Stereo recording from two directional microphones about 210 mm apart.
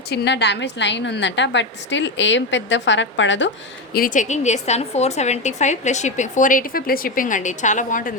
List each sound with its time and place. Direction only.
0.1 s a woman's voice: 55° left (ahead or behind)
3.9 s a woman's voice: 40° left (ahead or behind)